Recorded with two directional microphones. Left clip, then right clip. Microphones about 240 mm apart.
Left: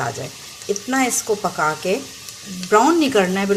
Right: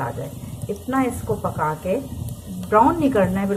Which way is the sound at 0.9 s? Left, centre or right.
Left.